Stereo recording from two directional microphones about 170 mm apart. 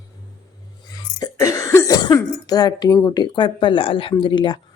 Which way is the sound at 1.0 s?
20° left (ahead or behind).